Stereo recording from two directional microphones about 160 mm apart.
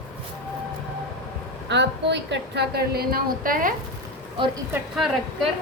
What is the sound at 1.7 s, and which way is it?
A woman's voice, 90° right.